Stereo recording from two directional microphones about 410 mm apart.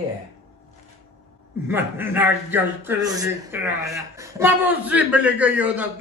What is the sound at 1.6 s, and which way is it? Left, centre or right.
A man's voice, centre.